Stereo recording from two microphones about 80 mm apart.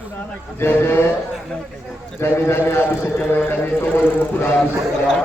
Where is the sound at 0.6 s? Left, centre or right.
Left.